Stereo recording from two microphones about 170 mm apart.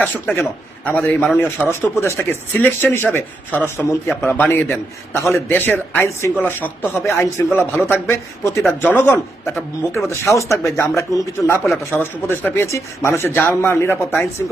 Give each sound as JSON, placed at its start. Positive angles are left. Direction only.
{"t": 0.0, "sound": "speech", "side_deg": 10}